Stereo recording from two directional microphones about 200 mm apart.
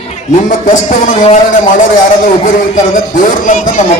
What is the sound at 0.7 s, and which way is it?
Speech, 40° left (ahead or behind).